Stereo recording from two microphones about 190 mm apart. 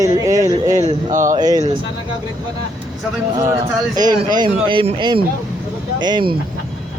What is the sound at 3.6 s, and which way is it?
A man's voice, 25° right (ahead or behind).